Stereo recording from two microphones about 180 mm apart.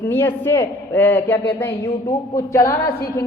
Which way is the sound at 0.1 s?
10° left (ahead or behind).